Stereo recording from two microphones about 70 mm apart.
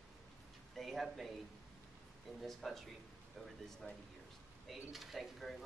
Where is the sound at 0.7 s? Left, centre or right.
Centre.